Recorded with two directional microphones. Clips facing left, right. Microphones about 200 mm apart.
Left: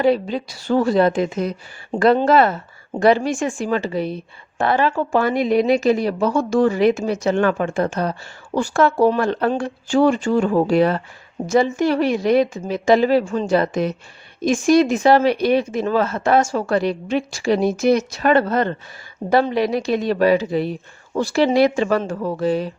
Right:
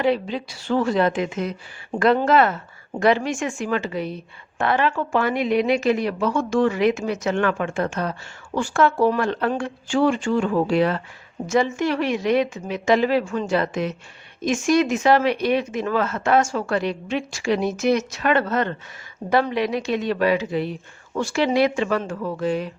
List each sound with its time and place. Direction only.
0.0 s a woman's voice: 40° left (ahead or behind)